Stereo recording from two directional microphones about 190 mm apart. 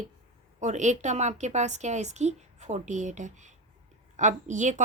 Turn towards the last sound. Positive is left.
turn(degrees=-40)  # may be behind; listen again after turning